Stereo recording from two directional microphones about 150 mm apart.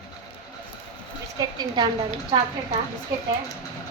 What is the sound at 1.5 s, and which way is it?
Speech, 30° right (ahead or behind).